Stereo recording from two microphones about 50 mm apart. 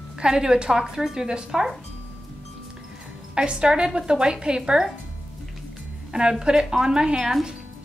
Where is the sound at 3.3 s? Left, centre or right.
Centre.